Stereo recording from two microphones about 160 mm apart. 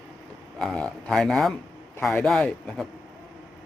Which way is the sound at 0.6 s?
Centre (ahead or behind).